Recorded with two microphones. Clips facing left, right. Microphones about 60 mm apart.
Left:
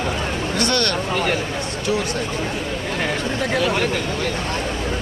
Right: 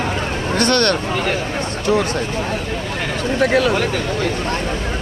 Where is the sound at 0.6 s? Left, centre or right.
Right.